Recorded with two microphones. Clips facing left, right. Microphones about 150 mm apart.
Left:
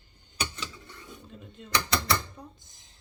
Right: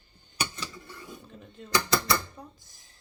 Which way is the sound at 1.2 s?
20° left (ahead or behind).